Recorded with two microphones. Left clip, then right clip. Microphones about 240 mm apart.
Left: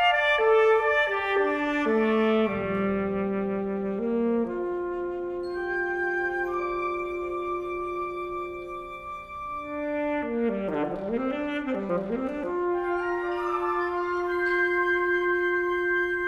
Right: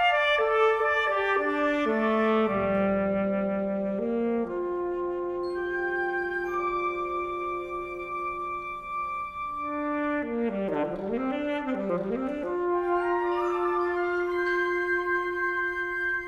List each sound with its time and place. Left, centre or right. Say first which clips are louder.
0.0 s music: left 1 dB; left
4.1 s brass instrument: left 4 dB; centre
10.0 s brass instrument: left 1 dB; left
12.5 s music: right 1 dB; centre